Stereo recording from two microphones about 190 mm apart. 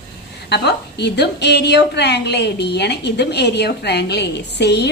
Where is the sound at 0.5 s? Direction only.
60° left (ahead or behind).